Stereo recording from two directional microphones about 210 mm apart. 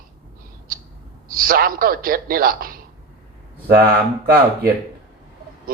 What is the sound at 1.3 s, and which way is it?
A man's voice, 45° right (ahead or behind).